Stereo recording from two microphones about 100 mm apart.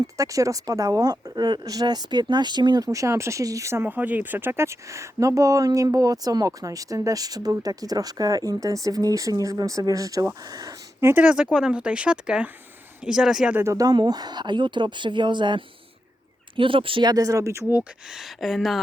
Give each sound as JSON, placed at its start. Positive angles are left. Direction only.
{"t": 0.2, "sound": "speech", "side_deg": -35}
{"t": 11.0, "sound": "speech", "side_deg": -15}
{"t": 13.6, "sound": "speech", "side_deg": -30}
{"t": 13.9, "sound": "speech", "side_deg": -45}
{"t": 17.1, "sound": "speech", "side_deg": -35}
{"t": 18.1, "sound": "speech", "side_deg": 0}